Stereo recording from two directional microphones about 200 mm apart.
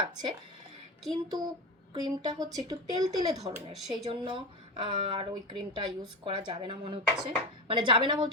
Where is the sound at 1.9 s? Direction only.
20° right (ahead or behind).